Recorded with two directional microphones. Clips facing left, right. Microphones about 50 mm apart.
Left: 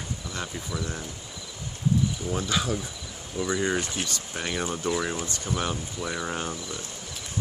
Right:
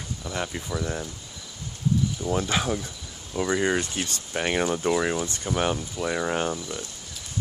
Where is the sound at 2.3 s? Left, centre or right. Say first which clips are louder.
Right 4 dB; right.